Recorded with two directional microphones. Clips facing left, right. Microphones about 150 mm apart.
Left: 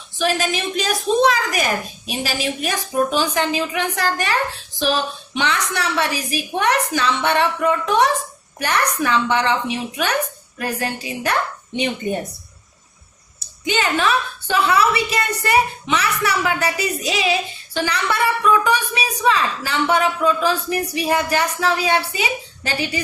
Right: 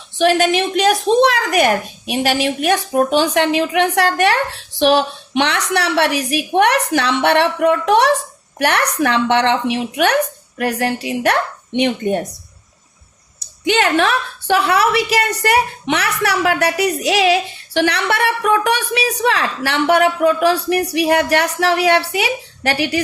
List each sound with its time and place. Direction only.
0.2 s a woman's voice: 65° right (ahead or behind)
13.7 s a woman's voice: 75° right (ahead or behind)